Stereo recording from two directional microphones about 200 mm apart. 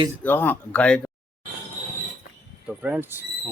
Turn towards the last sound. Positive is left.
turn(degrees=-10)  # may be behind; listen again after turning